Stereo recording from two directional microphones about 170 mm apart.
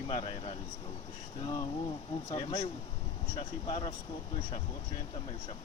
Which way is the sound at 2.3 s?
35° left (ahead or behind).